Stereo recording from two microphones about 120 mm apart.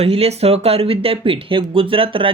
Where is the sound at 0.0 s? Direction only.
60° right (ahead or behind).